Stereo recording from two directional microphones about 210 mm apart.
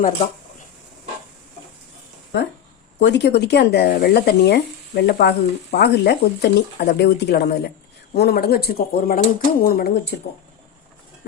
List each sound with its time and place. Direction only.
3.0 s speech: 55° left (ahead or behind)